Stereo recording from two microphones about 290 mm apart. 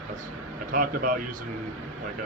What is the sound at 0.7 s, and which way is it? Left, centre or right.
Speech, right.